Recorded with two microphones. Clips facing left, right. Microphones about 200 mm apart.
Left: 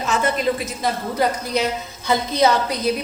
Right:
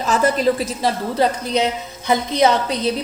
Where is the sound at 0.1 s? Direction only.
35° right (ahead or behind).